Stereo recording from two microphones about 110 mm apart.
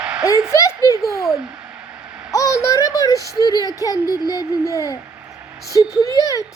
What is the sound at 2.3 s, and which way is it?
A child's voice, 30° left (ahead or behind).